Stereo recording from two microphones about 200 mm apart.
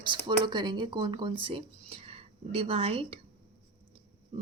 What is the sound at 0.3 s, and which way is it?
Speech, 20° right (ahead or behind).